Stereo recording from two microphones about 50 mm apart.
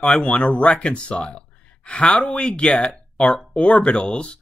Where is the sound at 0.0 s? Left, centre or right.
Centre.